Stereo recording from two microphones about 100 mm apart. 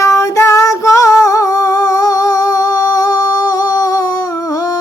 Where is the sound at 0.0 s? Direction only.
30° left (ahead or behind).